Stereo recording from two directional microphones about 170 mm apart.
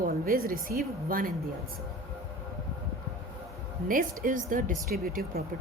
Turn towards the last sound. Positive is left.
turn(degrees=-60)  # may be behind; listen again after turning